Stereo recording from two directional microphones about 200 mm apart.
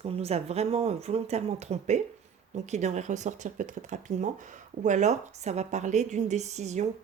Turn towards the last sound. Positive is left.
turn(degrees=-35)  # may be behind; listen again after turning